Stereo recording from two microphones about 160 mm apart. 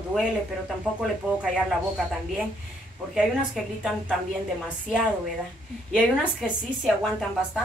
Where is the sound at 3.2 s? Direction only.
5° right (ahead or behind).